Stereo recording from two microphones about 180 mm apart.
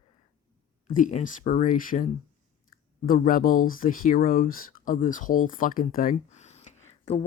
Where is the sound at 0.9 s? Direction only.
45° left (ahead or behind).